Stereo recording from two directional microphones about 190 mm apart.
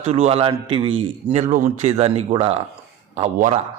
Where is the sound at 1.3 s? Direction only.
40° right (ahead or behind).